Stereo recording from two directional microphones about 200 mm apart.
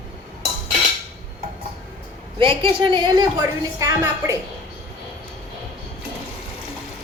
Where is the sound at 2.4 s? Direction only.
25° right (ahead or behind).